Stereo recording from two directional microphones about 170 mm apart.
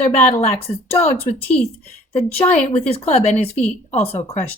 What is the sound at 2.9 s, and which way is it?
Speech, 35° left (ahead or behind).